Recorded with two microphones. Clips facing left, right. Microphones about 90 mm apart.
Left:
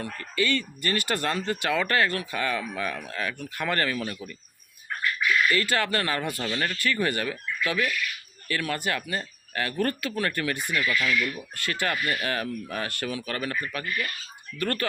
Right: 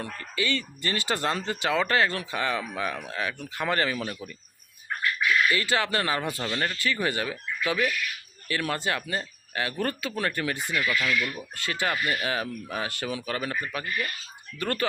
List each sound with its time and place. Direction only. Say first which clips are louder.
0.0 s speech: left 2 dB; 25° right (ahead or behind)
5.5 s speech: left 1 dB; 20° right (ahead or behind)